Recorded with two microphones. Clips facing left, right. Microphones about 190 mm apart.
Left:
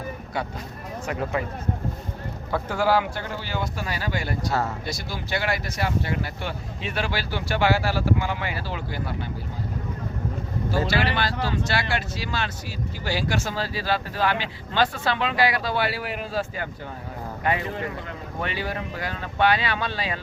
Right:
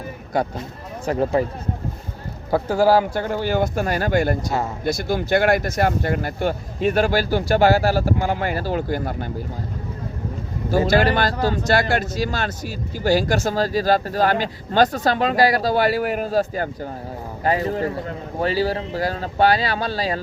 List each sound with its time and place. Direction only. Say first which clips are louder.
0.3 s speech: right 10 dB; 40° right (ahead or behind)
2.5 s speech: right 6 dB; 35° right (ahead or behind)
4.4 s speech: right 2 dB; 15° right (ahead or behind)
4.9 s speech: right 10 dB; 50° right (ahead or behind)
10.8 s speech: right 7 dB; 45° right (ahead or behind)